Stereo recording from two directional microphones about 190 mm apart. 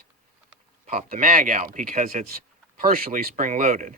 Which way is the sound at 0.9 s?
50° right (ahead or behind).